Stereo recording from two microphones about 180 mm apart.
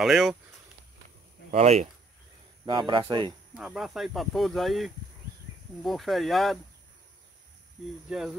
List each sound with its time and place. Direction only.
0.0 s speech: centre (ahead or behind)
1.5 s speech: 40° right (ahead or behind)
2.6 s speech: 25° right (ahead or behind)
3.5 s speech: centre (ahead or behind)
8.1 s speech: centre (ahead or behind)